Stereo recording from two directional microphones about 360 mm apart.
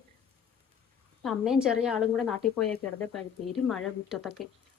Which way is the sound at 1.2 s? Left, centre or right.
Centre.